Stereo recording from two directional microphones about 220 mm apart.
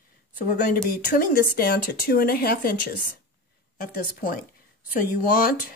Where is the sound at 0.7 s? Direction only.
40° left (ahead or behind).